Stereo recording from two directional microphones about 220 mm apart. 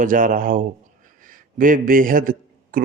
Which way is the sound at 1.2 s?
40° right (ahead or behind).